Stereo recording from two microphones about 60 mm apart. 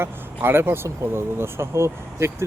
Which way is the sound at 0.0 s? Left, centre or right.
Right.